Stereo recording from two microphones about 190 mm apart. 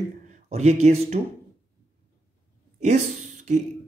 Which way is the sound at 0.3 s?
35° right (ahead or behind).